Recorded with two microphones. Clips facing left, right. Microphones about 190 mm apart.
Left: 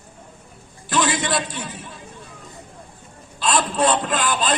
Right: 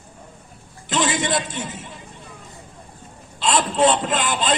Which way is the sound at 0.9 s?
20° right (ahead or behind).